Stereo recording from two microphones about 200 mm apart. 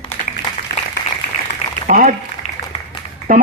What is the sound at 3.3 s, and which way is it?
Speech, 40° right (ahead or behind).